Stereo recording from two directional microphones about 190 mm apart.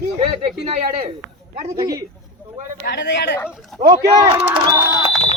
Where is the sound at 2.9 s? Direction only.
65° left (ahead or behind).